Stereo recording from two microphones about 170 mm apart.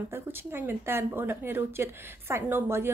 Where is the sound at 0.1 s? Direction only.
15° right (ahead or behind).